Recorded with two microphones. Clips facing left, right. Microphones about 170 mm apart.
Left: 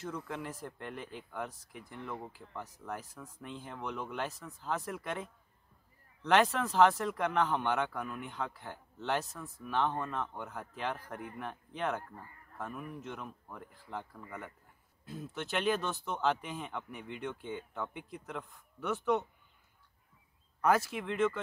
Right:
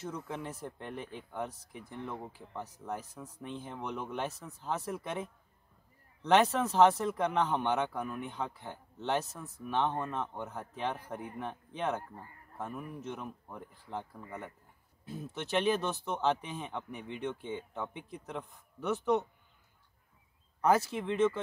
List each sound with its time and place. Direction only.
0.3 s speech: 20° right (ahead or behind)
15.5 s speech: 20° right (ahead or behind)
20.6 s speech: 20° right (ahead or behind)